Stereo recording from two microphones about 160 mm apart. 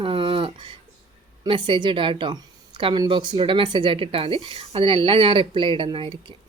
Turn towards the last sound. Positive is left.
turn(degrees=-30)  # may be behind; listen again after turning